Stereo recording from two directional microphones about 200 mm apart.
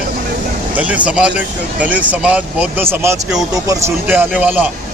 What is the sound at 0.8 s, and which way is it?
Speech, 5° right (ahead or behind).